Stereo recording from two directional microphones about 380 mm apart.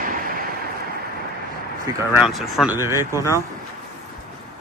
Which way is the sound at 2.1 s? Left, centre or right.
Centre.